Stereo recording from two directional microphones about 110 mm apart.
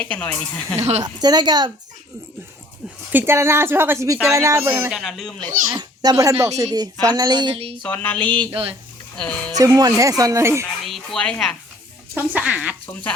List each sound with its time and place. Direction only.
0.0 s speech: 10° left (ahead or behind)
0.8 s speech: 75° right (ahead or behind)
1.0 s speech: 40° right (ahead or behind)
3.1 s speech: 20° right (ahead or behind)
4.9 s speech: centre (ahead or behind)
5.7 s a child's voice: 35° right (ahead or behind)
7.8 s speech: 15° left (ahead or behind)
9.6 s speech: 35° right (ahead or behind)
10.8 s speech: centre (ahead or behind)
12.1 s speech: 15° right (ahead or behind)
12.9 s speech: 10° left (ahead or behind)